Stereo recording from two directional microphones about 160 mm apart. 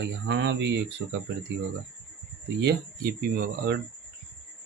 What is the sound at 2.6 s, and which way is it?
Speech, 80° right.